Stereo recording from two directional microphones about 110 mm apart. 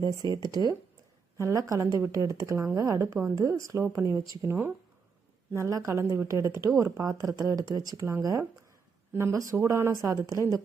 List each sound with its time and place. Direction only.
0.0 s speech: 35° right (ahead or behind)